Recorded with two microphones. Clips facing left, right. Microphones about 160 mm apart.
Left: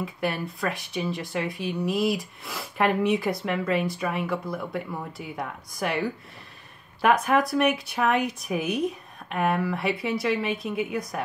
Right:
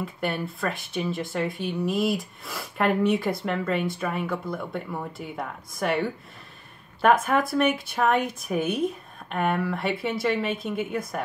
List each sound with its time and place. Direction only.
0.0 s speech: centre (ahead or behind)